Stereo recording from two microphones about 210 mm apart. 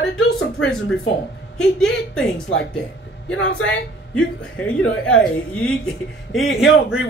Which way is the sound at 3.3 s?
65° left (ahead or behind).